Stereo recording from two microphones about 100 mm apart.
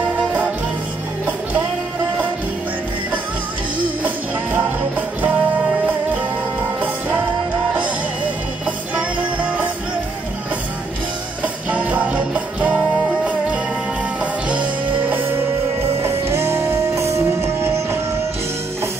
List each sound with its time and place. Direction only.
4.0 s music: 15° right (ahead or behind)
8.6 s music: 15° right (ahead or behind)
11.4 s music: 15° right (ahead or behind)